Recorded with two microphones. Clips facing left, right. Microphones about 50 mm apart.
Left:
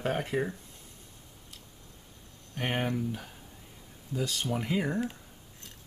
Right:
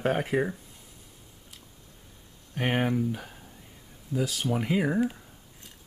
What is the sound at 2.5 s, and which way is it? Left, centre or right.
Speech, centre.